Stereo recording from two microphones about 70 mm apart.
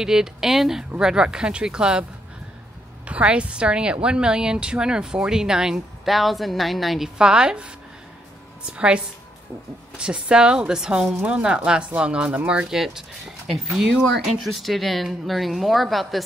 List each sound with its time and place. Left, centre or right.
0.0 s a woman's voice: centre
3.1 s a woman's voice: centre
7.2 s a woman's voice: centre
12.7 s a woman's voice: centre
14.4 s speech: centre